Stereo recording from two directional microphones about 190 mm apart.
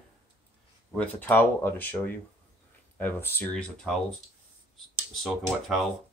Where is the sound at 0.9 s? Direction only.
10° left (ahead or behind).